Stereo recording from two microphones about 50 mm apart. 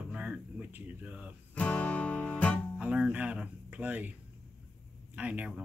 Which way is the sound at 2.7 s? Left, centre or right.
Centre.